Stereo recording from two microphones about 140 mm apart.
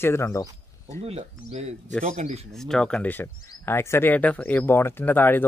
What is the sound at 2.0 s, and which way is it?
Speech, 65° right (ahead or behind).